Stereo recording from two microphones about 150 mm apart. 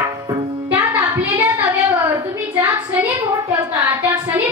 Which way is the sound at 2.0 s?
15° right (ahead or behind).